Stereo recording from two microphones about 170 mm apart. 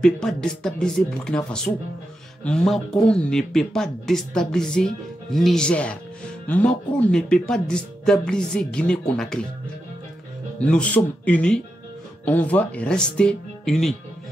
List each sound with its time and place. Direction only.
0.0 s speech: 5° left (ahead or behind)
10.6 s speech: 5° left (ahead or behind)